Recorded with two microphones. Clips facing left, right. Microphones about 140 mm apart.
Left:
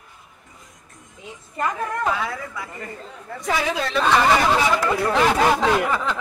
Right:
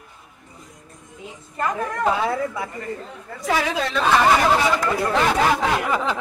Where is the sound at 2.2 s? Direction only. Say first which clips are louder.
Right 7 dB; 25° right (ahead or behind).